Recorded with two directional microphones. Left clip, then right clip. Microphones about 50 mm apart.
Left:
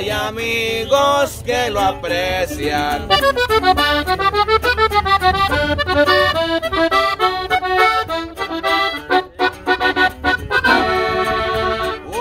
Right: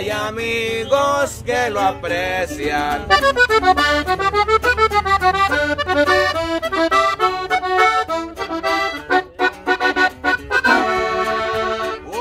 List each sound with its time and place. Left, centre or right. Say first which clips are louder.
0.1 s music: left 1 dB; right
3.1 s accordion: right 1 dB; right
4.6 s accordion: left 1 dB; right
9.4 s accordion: left 1 dB; centre